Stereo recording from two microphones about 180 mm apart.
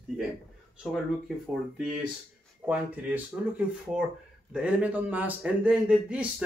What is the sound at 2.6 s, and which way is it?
Speech, 10° right (ahead or behind).